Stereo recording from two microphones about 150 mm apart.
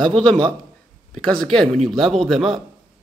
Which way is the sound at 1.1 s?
5° left (ahead or behind).